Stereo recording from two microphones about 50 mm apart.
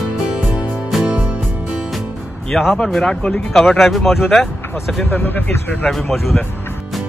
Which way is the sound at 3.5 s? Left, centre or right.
Centre.